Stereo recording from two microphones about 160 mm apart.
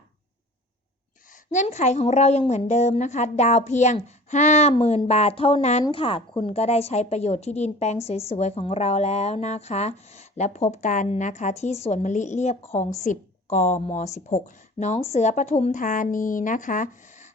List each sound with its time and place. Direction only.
1.5 s a woman's voice: 45° left (ahead or behind)